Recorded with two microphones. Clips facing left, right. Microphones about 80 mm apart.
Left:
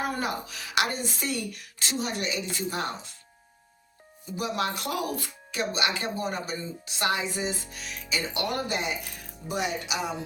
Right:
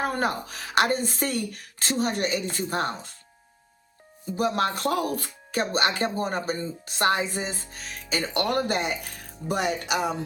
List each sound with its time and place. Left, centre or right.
0.0 s speech: right
4.4 s speech: right